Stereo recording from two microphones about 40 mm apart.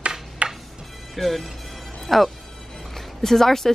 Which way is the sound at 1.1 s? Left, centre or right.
Centre.